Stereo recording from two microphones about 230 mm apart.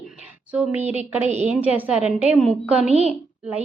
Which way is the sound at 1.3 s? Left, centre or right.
Right.